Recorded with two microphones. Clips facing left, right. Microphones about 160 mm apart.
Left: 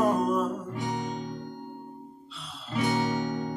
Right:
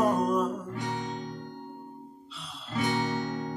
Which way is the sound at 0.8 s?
15° left (ahead or behind).